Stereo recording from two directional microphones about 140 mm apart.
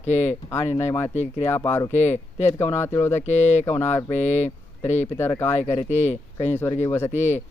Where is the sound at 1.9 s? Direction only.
55° left (ahead or behind).